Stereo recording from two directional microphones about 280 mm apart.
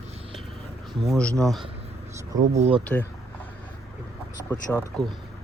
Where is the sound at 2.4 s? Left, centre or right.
Right.